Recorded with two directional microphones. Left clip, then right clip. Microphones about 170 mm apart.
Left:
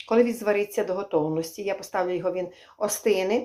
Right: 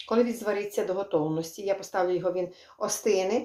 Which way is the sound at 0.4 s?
25° left (ahead or behind).